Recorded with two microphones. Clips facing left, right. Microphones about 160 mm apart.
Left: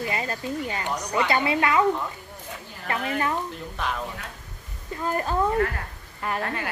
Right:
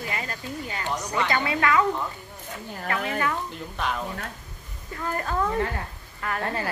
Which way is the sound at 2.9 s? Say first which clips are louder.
Left 1 dB; 30° left (ahead or behind).